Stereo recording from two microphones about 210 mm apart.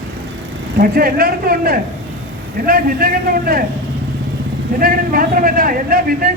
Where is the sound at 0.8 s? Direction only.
45° right (ahead or behind).